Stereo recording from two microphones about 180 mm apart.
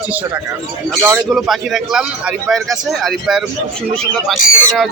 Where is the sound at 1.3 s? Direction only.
Centre (ahead or behind).